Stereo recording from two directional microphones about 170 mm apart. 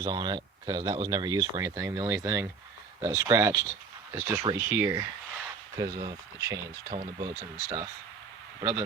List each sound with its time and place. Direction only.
0.0 s speech: 25° right (ahead or behind)